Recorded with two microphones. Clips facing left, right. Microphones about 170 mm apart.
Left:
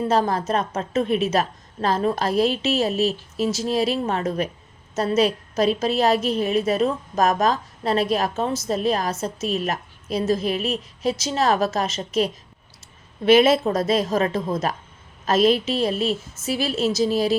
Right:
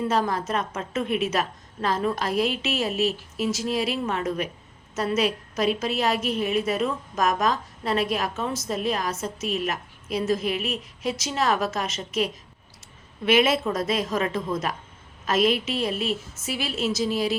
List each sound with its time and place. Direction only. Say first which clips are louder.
0.0 s a woman's voice: left 3 dB; 35° left (ahead or behind)